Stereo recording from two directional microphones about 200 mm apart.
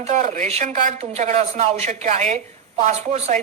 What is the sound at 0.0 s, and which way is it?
Speech, 40° right (ahead or behind).